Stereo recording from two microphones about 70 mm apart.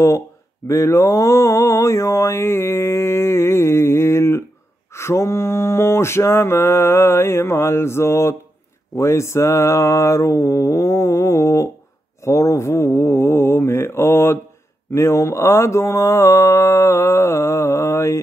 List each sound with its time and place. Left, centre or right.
0.7 s mantra: left